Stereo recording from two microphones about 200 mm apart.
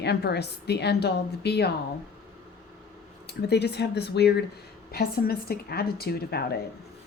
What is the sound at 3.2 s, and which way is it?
A woman's voice, 55° left (ahead or behind).